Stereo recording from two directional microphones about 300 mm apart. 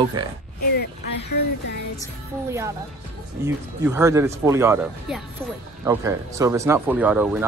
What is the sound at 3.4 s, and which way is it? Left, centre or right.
Speech, centre.